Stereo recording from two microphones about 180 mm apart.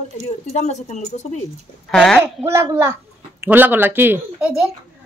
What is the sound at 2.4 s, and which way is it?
A child's voice, 15° right (ahead or behind).